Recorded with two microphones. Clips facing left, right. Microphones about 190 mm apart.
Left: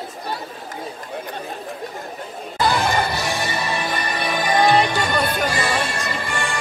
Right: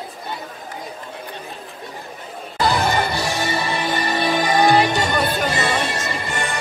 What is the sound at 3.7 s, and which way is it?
Music, 25° right (ahead or behind).